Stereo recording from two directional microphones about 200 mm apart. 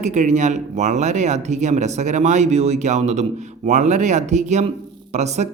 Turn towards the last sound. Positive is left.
turn(degrees=-35)  # may be behind; listen again after turning